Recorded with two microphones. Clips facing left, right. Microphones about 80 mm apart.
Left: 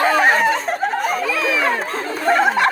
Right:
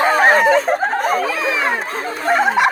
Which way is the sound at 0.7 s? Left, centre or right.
Right.